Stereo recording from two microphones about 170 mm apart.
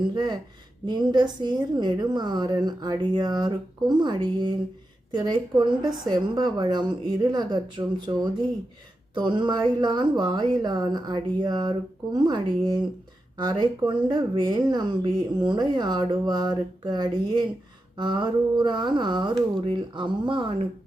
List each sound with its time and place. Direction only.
0.1 s speech: 25° right (ahead or behind)